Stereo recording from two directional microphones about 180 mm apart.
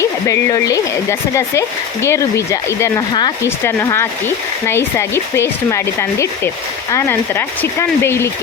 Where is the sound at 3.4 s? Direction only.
15° left (ahead or behind).